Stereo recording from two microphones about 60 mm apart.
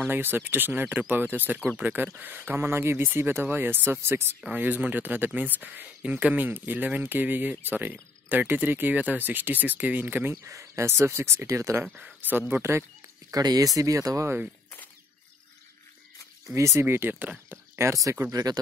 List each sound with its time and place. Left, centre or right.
0.0 s speech: right
2.6 s speech: right
4.6 s speech: right
6.4 s speech: right
10.4 s speech: right
11.4 s speech: right
11.8 s speech: right
13.3 s speech: right
16.5 s speech: right
16.8 s speech: right
17.7 s speech: right